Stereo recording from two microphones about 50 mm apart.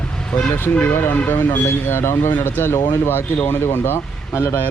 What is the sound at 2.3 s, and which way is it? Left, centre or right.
Speech, left.